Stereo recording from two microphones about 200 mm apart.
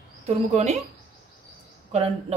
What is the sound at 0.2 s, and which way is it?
Speech, 35° right (ahead or behind).